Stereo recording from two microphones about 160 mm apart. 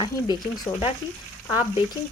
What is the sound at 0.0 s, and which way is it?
Speech, 25° left (ahead or behind).